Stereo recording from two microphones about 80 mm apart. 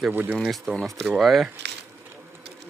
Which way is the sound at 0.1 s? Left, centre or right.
Right.